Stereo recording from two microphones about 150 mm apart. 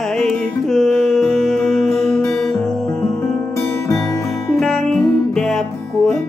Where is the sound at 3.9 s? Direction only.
20° left (ahead or behind).